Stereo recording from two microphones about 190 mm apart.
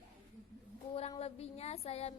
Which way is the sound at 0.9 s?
30° left (ahead or behind).